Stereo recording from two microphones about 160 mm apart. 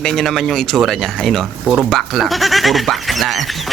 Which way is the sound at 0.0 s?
5° left (ahead or behind).